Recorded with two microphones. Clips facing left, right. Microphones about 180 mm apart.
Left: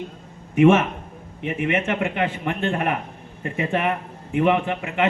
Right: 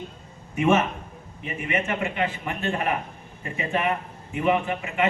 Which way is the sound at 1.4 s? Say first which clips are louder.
Left 5 dB; 65° left (ahead or behind).